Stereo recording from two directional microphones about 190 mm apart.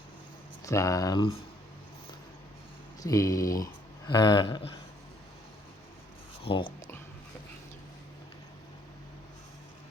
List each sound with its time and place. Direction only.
0.6 s speech: 15° left (ahead or behind)
3.0 s speech: 20° left (ahead or behind)
6.4 s speech: 25° left (ahead or behind)